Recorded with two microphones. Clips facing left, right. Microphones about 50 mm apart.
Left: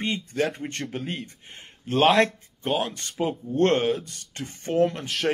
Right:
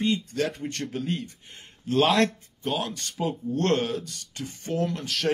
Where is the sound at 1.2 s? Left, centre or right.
Left.